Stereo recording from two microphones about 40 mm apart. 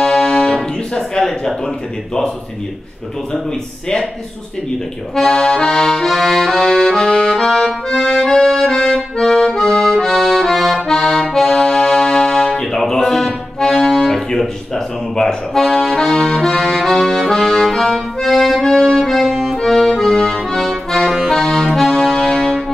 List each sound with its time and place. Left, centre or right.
0.0 s music: centre
0.9 s speech: centre
5.1 s accordion: centre
10.9 s accordion: centre
18.3 s accordion: centre
18.6 s accordion: centre